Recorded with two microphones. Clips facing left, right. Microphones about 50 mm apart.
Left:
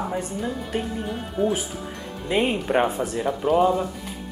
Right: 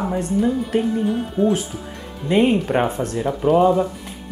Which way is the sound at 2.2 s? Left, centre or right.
Centre.